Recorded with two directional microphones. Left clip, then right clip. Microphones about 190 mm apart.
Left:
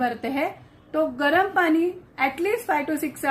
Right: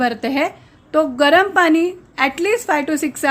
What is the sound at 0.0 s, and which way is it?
A woman's voice, 50° right (ahead or behind).